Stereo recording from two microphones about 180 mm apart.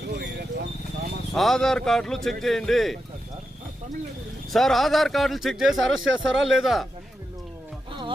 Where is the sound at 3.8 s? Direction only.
45° right (ahead or behind).